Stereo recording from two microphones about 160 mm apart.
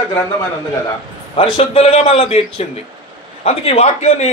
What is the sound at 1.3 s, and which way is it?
A man's voice, 40° left (ahead or behind).